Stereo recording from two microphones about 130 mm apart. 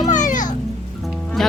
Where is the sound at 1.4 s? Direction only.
Centre (ahead or behind).